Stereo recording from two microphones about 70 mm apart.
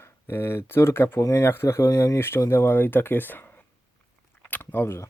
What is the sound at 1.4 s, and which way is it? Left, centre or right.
Speech, left.